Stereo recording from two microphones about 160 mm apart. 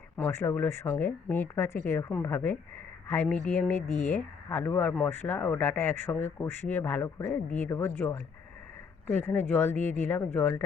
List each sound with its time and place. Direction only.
0.2 s speech: 15° left (ahead or behind)
3.8 s speech: 50° left (ahead or behind)
4.1 s speech: 10° left (ahead or behind)